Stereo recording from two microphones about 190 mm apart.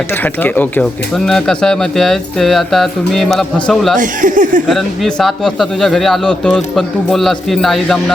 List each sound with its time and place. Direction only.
0.4 s speech: 10° left (ahead or behind)
3.9 s speech: 45° right (ahead or behind)
4.7 s speech: centre (ahead or behind)